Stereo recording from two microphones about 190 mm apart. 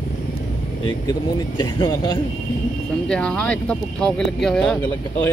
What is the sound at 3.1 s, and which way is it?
Speech, 5° left (ahead or behind).